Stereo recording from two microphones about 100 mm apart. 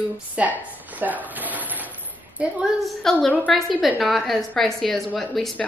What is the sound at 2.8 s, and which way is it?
A woman's voice, 5° left (ahead or behind).